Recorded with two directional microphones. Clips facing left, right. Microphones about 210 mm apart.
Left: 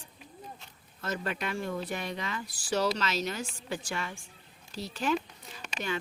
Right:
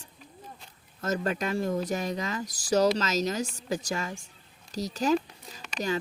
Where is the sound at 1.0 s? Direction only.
45° right (ahead or behind).